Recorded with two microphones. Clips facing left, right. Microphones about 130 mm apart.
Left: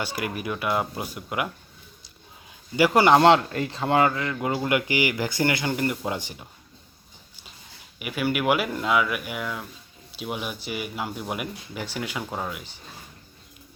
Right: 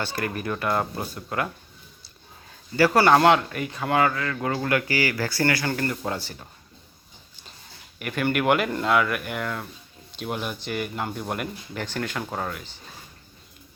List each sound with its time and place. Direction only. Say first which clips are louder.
0.0 s speech: right 1 dB; 10° left (ahead or behind)
2.7 s speech: even; 15° left (ahead or behind)
7.9 s speech: right 1 dB; 5° left (ahead or behind)